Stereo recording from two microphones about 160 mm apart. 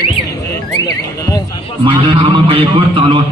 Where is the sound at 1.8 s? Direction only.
35° right (ahead or behind).